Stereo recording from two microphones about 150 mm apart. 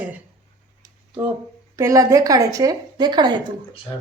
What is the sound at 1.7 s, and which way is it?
Speech, 20° right (ahead or behind).